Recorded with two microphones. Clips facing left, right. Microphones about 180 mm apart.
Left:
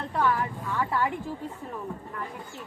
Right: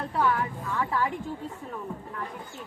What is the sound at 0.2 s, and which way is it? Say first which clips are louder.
Speech: even; centre (ahead or behind).